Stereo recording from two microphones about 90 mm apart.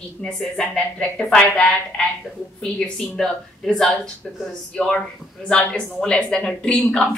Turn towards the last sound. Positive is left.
turn(degrees=10)  # may be behind; listen again after turning